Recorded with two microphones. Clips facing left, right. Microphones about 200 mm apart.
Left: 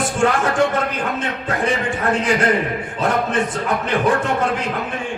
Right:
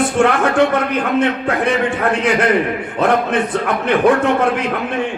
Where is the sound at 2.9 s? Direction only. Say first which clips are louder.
Right 4 dB; 60° right (ahead or behind).